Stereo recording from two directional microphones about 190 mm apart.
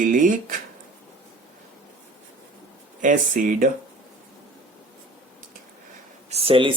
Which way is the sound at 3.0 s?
45° right (ahead or behind).